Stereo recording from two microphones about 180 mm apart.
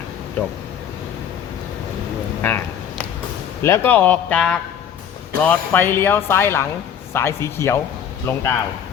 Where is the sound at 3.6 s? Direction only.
15° left (ahead or behind).